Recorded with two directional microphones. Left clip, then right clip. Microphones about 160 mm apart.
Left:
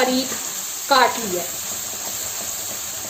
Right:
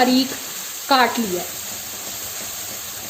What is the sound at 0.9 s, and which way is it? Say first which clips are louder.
Speech: even; 70° right (ahead or behind).